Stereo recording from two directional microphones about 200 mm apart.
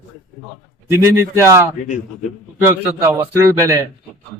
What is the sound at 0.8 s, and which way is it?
A man's voice, 15° right (ahead or behind).